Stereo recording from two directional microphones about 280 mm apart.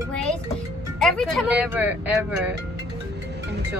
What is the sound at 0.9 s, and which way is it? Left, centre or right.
Speech, centre.